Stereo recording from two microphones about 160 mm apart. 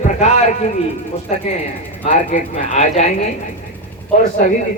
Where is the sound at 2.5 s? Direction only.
45° left (ahead or behind).